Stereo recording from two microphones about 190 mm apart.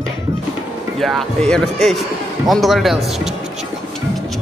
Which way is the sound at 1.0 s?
5° left (ahead or behind).